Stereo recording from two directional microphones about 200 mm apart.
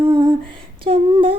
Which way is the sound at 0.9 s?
25° right (ahead or behind).